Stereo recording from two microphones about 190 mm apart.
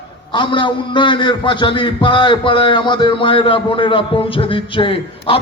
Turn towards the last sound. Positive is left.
turn(degrees=30)  # may be behind; listen again after turning